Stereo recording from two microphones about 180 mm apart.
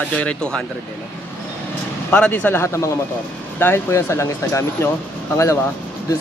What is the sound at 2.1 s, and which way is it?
Speech, 10° left (ahead or behind).